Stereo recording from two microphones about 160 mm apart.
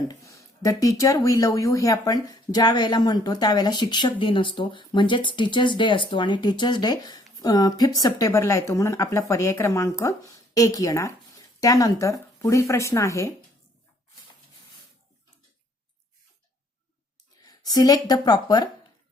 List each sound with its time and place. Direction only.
0.1 s speech: 20° left (ahead or behind)
17.4 s speech: 25° left (ahead or behind)